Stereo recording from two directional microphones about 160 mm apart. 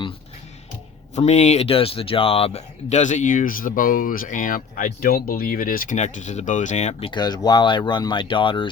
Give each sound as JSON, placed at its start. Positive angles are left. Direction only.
{"t": 1.1, "sound": "speech", "side_deg": 45}
{"t": 7.1, "sound": "speech", "side_deg": 25}